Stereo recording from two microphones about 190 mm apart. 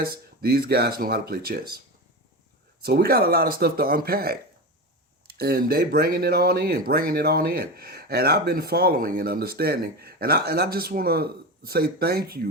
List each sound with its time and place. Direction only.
0.0 s speech: 55° right (ahead or behind)
2.8 s speech: 55° right (ahead or behind)